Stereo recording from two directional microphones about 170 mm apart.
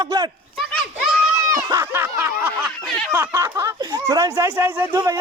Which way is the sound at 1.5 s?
15° right (ahead or behind).